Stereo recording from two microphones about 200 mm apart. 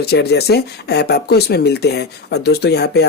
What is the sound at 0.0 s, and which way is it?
Speech, 55° left (ahead or behind).